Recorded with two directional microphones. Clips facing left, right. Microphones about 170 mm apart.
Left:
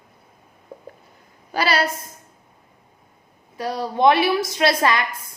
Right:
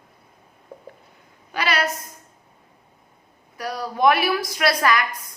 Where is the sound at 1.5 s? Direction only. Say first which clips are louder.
Left 3 dB; 35° left (ahead or behind).